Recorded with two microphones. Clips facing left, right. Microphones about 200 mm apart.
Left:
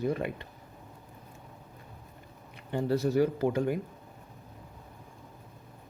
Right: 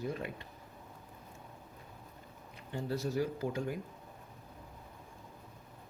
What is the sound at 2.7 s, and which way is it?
Speech, 70° left (ahead or behind).